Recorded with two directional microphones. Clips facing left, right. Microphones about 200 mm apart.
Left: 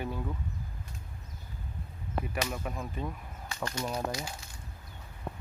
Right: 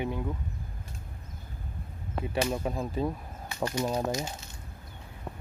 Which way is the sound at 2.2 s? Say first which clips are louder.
Right 6 dB; 30° right (ahead or behind).